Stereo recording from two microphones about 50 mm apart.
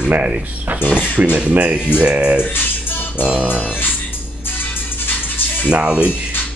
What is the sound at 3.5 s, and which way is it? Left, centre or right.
Music, left.